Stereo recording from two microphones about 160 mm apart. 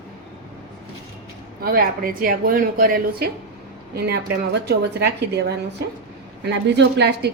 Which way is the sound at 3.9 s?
90° right.